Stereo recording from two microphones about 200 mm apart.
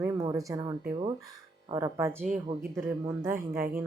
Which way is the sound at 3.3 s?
45° right (ahead or behind).